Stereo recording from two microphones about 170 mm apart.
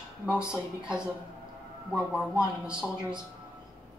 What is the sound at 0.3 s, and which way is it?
Speech, 5° right (ahead or behind).